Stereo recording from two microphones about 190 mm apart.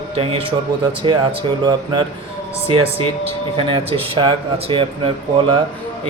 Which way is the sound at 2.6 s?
30° right (ahead or behind).